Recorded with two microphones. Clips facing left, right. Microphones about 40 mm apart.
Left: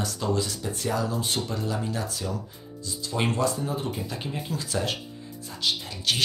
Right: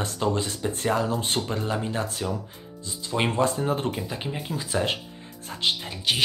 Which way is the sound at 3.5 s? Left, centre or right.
Right.